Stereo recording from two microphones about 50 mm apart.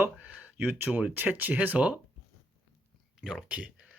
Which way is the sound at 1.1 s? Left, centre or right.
Right.